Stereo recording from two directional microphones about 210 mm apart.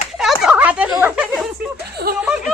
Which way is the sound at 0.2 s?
Centre (ahead or behind).